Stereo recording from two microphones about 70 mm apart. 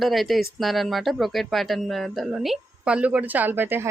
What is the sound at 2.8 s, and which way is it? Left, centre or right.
Speech, centre.